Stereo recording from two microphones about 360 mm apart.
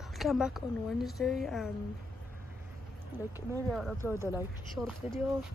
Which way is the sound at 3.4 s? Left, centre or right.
Centre.